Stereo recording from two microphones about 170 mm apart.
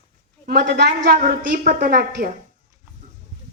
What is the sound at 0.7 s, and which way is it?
Speech, 60° right (ahead or behind).